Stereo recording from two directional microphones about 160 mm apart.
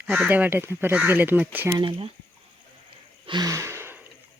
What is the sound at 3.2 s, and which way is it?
Gasp, 25° right (ahead or behind).